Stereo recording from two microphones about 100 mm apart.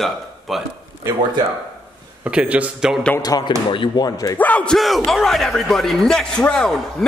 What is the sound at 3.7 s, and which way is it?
Speech, 55° left (ahead or behind).